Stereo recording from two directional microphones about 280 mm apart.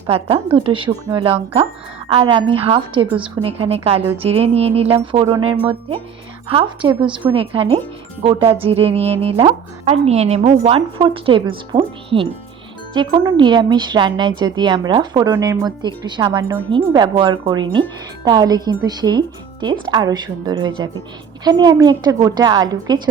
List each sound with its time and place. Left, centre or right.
0.5 s speech: centre